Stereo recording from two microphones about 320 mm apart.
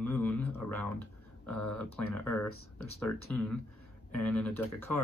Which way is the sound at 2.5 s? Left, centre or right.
Left.